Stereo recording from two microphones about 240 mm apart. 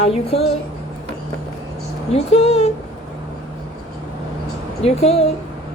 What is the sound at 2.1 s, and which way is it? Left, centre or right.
Speech, left.